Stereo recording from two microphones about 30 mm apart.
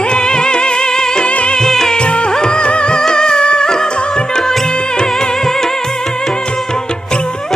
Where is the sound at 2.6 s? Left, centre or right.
Left.